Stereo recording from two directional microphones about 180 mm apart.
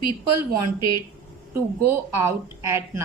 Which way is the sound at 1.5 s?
15° right (ahead or behind).